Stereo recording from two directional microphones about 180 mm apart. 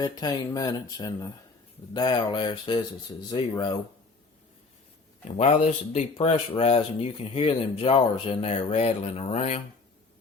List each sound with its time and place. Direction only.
0.0 s speech: 20° left (ahead or behind)
5.4 s speech: 35° left (ahead or behind)